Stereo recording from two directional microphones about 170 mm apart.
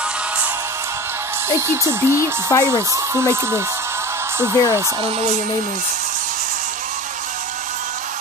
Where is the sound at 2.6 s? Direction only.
15° right (ahead or behind).